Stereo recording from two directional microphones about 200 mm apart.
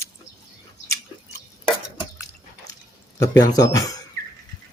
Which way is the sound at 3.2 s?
20° left (ahead or behind).